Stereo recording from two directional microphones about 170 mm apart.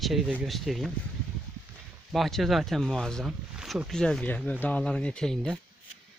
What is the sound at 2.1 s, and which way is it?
Speech, centre (ahead or behind).